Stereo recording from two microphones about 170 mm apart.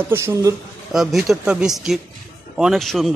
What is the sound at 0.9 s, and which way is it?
Speech, centre (ahead or behind).